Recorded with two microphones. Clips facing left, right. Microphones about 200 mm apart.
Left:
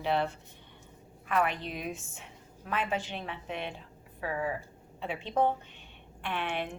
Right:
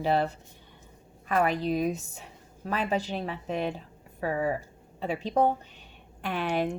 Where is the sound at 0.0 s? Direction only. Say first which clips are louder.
Right 4 dB; 40° right (ahead or behind).